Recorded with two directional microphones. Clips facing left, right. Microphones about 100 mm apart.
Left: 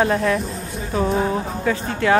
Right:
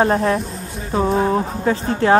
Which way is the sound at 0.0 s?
35° right (ahead or behind).